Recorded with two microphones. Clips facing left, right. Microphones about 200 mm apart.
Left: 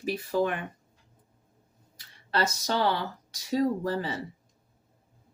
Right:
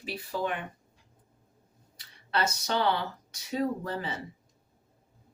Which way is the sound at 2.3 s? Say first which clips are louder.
Left 1 dB; 35° left (ahead or behind).